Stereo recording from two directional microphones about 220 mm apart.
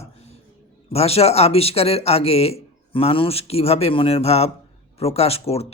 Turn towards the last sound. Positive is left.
turn(degrees=25)  # may be behind; listen again after turning